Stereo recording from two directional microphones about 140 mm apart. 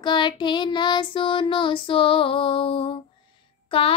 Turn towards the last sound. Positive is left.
turn(degrees=40)  # may be behind; listen again after turning